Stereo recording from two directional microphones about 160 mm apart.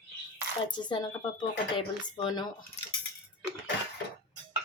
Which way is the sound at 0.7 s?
30° left (ahead or behind).